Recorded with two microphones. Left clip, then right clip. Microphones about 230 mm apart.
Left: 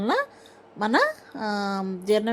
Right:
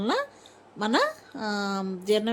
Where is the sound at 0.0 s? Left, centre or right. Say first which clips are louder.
Left 3 dB; centre.